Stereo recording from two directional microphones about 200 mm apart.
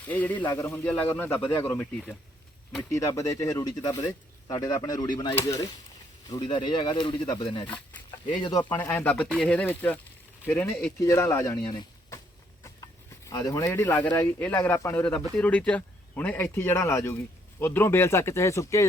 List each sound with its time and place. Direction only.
0.0 s speech: 10° left (ahead or behind)
2.9 s speech: 15° left (ahead or behind)
8.7 s speech: 10° left (ahead or behind)